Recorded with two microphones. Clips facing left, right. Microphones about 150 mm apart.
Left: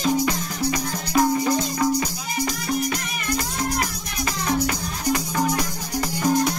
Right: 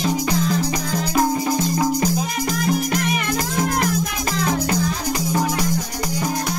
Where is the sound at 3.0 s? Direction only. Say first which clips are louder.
Right 6 dB; 90° right.